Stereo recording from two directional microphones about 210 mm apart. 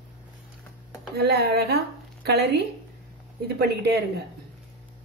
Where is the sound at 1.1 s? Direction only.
50° right (ahead or behind).